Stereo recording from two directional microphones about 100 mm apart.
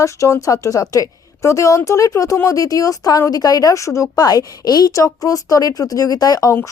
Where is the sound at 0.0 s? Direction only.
30° left (ahead or behind).